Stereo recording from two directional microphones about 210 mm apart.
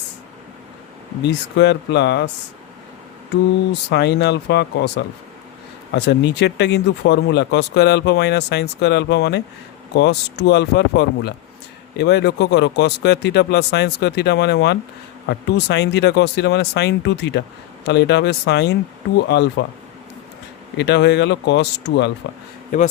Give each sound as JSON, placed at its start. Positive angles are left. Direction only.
{"t": 1.2, "sound": "speech", "side_deg": 55}
{"t": 3.8, "sound": "speech", "side_deg": 55}
{"t": 20.7, "sound": "speech", "side_deg": 55}
{"t": 22.7, "sound": "speech", "side_deg": 35}